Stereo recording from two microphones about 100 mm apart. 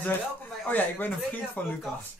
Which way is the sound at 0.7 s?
20° left (ahead or behind).